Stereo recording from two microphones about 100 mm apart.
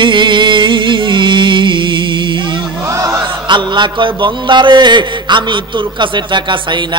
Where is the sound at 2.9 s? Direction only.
30° right (ahead or behind).